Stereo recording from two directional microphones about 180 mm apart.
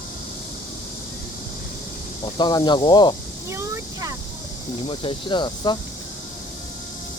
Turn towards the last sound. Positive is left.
turn(degrees=25)  # may be behind; listen again after turning